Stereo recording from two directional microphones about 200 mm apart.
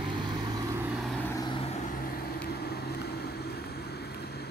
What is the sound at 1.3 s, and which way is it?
Vehicle, 20° left (ahead or behind).